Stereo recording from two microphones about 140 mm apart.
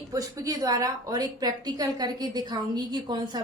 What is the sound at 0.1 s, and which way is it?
A woman's voice, 25° right (ahead or behind).